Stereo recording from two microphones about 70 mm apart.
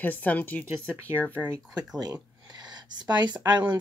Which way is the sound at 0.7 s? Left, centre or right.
Right.